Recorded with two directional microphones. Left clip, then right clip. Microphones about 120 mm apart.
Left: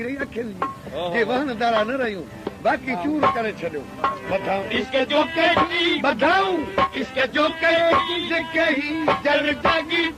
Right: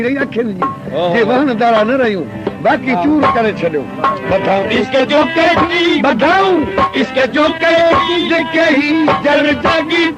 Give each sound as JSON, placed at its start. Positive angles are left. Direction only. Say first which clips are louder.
{"t": 0.0, "sound": "speech", "louder": "right 12 dB", "side_deg": -25}